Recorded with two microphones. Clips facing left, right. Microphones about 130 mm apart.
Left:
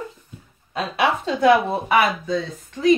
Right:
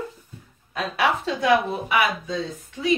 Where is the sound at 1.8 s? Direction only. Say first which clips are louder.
Left 4 dB; 55° left (ahead or behind).